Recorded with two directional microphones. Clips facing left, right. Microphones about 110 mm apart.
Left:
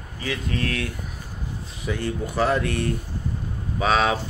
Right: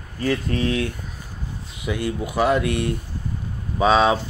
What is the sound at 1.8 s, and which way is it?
A man's voice, 15° right (ahead or behind).